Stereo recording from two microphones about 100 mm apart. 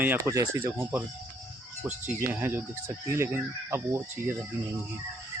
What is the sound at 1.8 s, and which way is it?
Speech, 20° right (ahead or behind).